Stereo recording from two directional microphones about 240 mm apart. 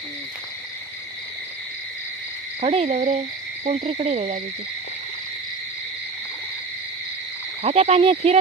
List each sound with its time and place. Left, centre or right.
2.6 s speech: right
7.6 s speech: right